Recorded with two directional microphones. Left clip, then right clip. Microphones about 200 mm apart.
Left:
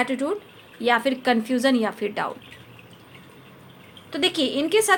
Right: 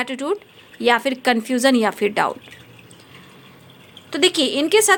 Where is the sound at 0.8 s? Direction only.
35° right (ahead or behind).